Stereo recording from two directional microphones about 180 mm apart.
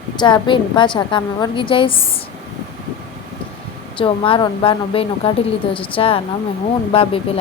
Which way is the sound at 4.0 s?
30° left (ahead or behind).